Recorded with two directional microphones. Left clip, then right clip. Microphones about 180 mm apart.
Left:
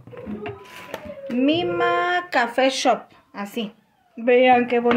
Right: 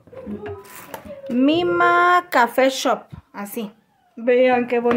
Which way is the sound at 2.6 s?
5° right (ahead or behind).